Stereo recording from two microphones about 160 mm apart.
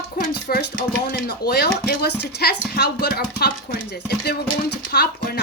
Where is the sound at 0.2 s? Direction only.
65° left (ahead or behind).